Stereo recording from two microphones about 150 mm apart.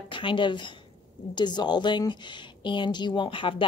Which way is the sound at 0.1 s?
35° left (ahead or behind).